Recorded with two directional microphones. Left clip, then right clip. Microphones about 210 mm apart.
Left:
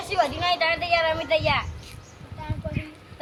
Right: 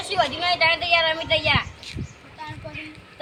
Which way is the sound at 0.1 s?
5° right (ahead or behind).